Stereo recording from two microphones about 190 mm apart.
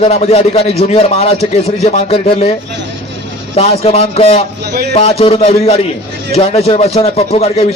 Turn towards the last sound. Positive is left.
turn(degrees=30)  # may be behind; listen again after turning